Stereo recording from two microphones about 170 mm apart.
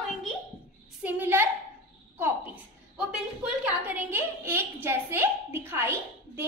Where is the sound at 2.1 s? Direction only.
10° right (ahead or behind).